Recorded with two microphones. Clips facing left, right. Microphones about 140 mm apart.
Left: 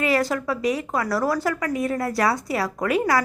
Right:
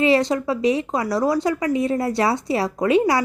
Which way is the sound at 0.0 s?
25° right (ahead or behind).